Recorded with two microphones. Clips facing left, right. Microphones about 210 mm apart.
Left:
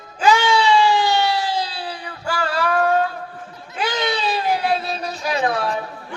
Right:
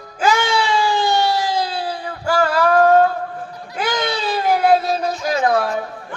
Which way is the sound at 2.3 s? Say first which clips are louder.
Right 6 dB; 45° right (ahead or behind).